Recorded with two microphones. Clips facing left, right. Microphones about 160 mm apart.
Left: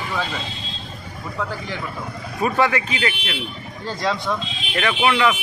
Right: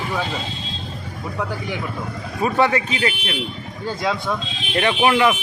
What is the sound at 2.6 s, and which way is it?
Speech, 20° right (ahead or behind).